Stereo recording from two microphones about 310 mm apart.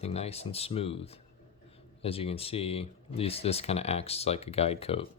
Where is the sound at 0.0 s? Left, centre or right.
Centre.